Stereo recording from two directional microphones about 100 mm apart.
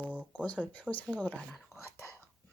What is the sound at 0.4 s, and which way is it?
Speech, 15° left (ahead or behind).